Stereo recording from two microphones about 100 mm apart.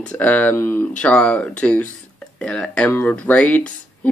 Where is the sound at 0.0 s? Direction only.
15° left (ahead or behind).